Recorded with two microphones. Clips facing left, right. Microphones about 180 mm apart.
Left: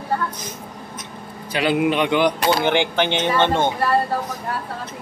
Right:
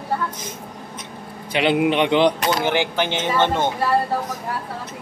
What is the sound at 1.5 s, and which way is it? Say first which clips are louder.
Speech: right 1 dB; 25° right (ahead or behind).